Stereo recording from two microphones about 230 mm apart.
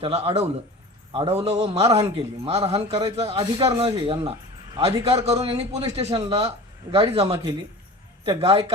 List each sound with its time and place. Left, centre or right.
0.0 s a man's voice: right